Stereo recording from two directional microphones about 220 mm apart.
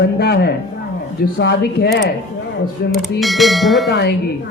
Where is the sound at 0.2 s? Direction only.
45° left (ahead or behind).